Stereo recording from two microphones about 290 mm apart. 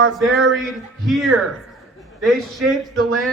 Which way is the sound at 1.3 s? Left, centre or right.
Right.